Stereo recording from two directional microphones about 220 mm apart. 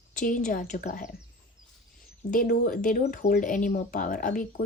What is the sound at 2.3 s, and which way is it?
Speech, 40° left (ahead or behind).